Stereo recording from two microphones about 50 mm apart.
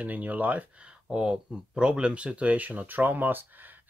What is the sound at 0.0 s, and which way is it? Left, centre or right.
Speech, right.